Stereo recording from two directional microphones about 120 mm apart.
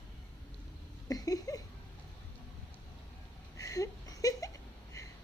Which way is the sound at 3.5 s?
30° left (ahead or behind).